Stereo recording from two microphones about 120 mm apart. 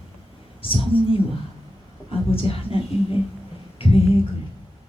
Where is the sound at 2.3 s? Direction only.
50° left (ahead or behind).